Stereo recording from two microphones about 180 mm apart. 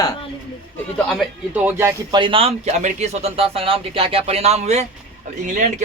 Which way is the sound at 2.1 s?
30° right (ahead or behind).